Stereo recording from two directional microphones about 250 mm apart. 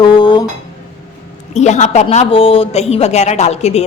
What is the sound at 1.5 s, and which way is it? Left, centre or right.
Speech, left.